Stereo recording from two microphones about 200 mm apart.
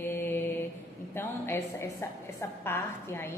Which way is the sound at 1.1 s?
10° left (ahead or behind).